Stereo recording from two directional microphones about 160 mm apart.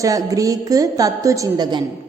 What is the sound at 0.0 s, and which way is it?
A woman's voice, 20° right (ahead or behind).